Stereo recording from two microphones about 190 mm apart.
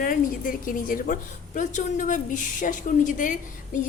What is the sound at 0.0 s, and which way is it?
A woman's voice, 45° left (ahead or behind).